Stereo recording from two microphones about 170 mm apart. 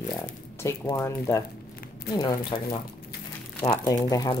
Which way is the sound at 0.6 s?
15° left (ahead or behind).